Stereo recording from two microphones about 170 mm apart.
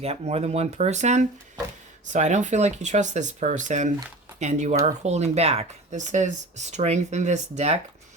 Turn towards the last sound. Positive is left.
turn(degrees=-40)  # may be behind; listen again after turning